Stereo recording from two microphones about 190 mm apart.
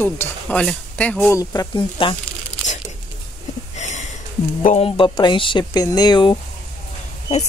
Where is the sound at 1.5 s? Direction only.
25° left (ahead or behind).